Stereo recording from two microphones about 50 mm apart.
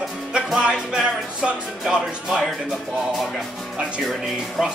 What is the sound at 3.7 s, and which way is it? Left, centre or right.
Speech, right.